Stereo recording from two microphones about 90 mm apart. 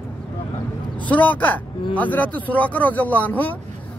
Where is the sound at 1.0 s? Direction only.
15° left (ahead or behind).